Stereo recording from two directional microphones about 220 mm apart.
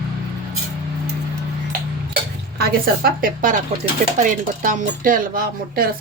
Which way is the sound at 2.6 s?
40° right (ahead or behind).